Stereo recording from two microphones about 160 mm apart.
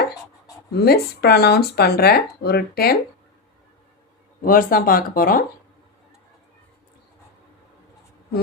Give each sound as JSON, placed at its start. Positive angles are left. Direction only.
{"t": 0.7, "sound": "speech", "side_deg": 80}
{"t": 4.4, "sound": "speech", "side_deg": 60}